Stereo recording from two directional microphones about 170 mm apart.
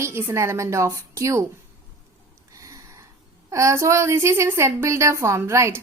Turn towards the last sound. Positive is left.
turn(degrees=-15)  # may be behind; listen again after turning